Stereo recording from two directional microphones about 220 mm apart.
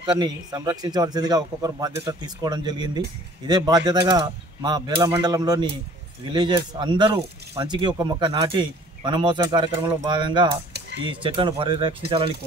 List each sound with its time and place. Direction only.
0.0 s a man's voice: 20° right (ahead or behind)